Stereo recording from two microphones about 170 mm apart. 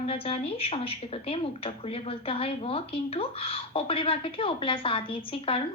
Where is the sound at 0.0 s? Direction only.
35° left (ahead or behind).